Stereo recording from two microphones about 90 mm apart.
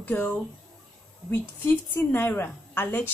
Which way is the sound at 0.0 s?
20° left (ahead or behind).